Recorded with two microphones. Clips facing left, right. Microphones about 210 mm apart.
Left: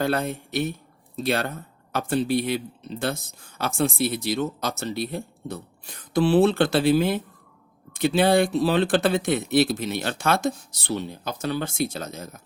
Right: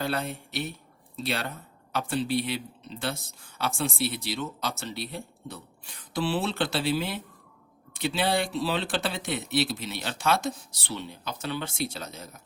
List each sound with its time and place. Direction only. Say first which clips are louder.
0.0 s speech: left 6 dB; 45° left (ahead or behind)